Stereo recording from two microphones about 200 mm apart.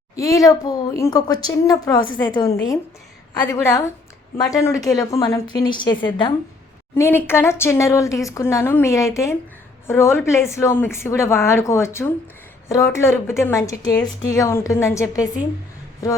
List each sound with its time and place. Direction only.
0.2 s a woman's voice: 15° left (ahead or behind)
6.9 s a woman's voice: 10° left (ahead or behind)